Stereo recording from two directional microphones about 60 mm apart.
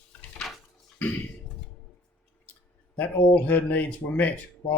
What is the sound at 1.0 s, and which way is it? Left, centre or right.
Speech, left.